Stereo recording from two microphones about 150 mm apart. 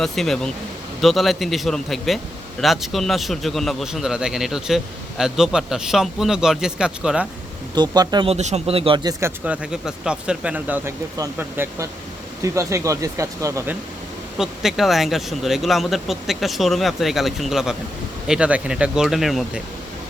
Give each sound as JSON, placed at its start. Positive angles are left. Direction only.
{"t": 0.0, "sound": "a man's voice", "side_deg": 0}
{"t": 7.8, "sound": "speech", "side_deg": -30}
{"t": 8.3, "sound": "a man's voice", "side_deg": -50}
{"t": 9.4, "sound": "speech", "side_deg": -5}
{"t": 14.3, "sound": "a man's voice", "side_deg": 0}